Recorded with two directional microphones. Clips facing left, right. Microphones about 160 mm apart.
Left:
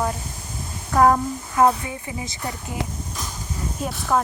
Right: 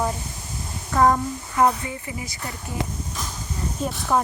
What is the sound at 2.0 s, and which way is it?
Speech, 25° left (ahead or behind).